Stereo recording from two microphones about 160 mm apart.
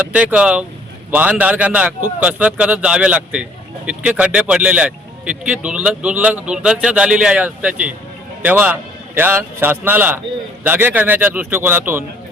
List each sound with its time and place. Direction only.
0.1 s speech: 10° right (ahead or behind)